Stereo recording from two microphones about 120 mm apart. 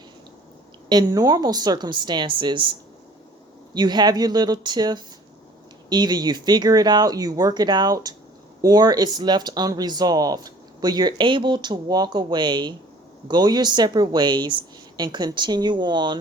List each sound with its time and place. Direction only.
0.9 s speech: 35° right (ahead or behind)
3.8 s speech: 35° right (ahead or behind)